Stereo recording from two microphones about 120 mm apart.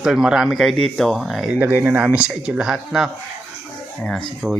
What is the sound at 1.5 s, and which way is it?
Speech, 15° right (ahead or behind).